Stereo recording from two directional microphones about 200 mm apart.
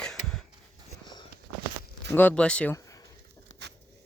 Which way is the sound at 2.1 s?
10° left (ahead or behind).